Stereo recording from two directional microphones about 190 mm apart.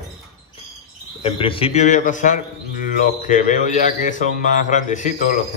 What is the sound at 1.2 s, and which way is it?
A man's voice, 30° left (ahead or behind).